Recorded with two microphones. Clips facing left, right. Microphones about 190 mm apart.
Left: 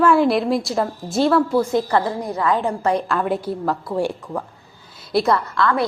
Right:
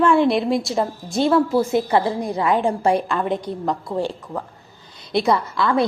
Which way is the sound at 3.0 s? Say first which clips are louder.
Left 1 dB; centre (ahead or behind).